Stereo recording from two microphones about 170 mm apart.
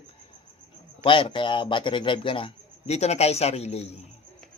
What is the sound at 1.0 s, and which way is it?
A man's voice, 30° left (ahead or behind).